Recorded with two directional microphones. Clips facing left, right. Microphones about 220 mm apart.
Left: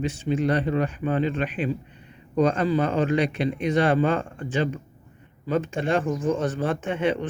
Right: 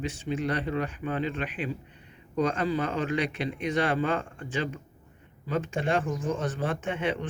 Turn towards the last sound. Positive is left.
turn(degrees=35)  # may be behind; listen again after turning